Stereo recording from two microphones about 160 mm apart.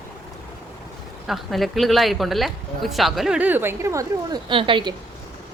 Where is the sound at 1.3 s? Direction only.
Centre (ahead or behind); by 5.0 s 30° right (ahead or behind).